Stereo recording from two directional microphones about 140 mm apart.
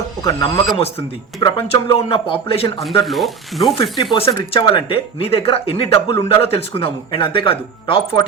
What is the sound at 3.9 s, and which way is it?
Speech, 30° left (ahead or behind).